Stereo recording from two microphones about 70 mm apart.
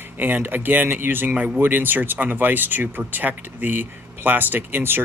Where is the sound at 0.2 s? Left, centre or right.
Right.